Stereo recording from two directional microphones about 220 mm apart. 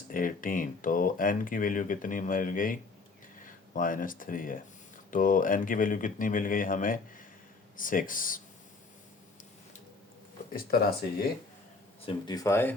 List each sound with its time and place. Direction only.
0.1 s speech: 40° left (ahead or behind)
10.5 s speech: 45° left (ahead or behind)
12.0 s speech: 20° left (ahead or behind)